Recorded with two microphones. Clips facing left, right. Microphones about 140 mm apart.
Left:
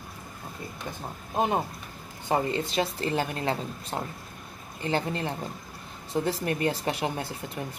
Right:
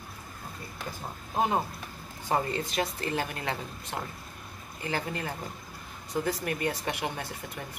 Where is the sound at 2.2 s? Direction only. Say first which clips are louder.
Left 3 dB; 25° left (ahead or behind).